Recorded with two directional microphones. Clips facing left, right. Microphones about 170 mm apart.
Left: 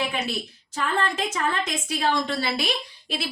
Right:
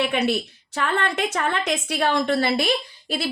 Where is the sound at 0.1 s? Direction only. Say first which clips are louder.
Right 7 dB; 70° right (ahead or behind).